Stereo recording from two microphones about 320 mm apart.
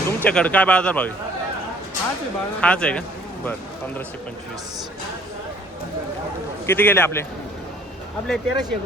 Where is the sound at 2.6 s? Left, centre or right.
Centre.